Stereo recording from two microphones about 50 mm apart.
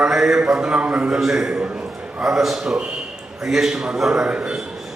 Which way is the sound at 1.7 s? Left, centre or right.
Centre.